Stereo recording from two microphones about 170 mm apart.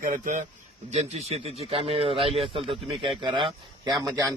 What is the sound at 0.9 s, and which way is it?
A man's voice, 40° right (ahead or behind).